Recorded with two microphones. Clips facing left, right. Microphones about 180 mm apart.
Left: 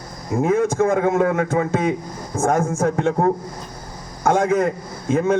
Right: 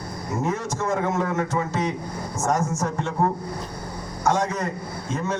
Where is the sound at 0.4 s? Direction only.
55° left (ahead or behind).